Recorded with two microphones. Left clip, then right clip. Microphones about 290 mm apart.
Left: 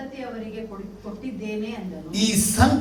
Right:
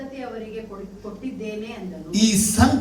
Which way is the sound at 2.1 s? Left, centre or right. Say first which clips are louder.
Right 1 dB; right.